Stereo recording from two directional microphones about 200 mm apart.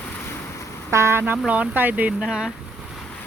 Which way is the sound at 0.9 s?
15° right (ahead or behind).